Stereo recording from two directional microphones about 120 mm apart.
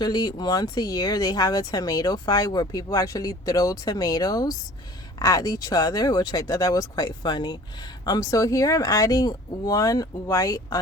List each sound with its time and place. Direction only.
0.0 s speech: 35° left (ahead or behind)